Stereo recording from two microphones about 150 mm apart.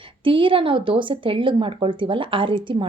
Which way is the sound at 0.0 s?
35° right (ahead or behind).